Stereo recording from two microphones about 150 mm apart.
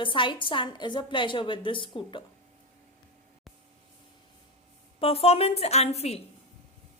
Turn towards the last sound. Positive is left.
turn(degrees=45)  # may be behind; listen again after turning